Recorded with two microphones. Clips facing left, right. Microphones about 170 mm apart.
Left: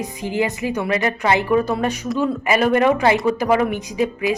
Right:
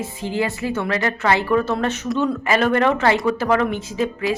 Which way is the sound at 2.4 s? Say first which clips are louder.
Left 2 dB; 10° left (ahead or behind).